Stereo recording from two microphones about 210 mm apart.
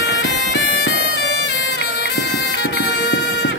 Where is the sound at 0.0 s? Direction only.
55° left (ahead or behind).